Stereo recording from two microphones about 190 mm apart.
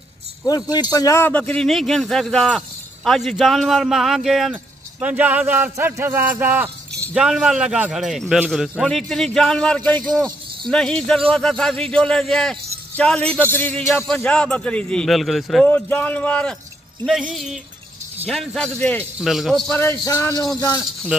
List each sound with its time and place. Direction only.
0.4 s a man's voice: 20° left (ahead or behind); by 19.6 s centre (ahead or behind)
19.7 s a man's voice: 10° left (ahead or behind)